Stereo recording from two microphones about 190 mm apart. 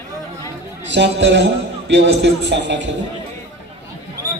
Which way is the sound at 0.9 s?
65° right (ahead or behind).